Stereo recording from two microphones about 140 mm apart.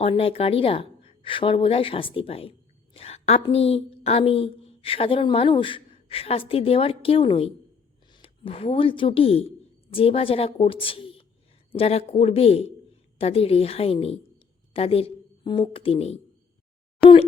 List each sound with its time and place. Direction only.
0.0 s a woman's voice: 40° left (ahead or behind)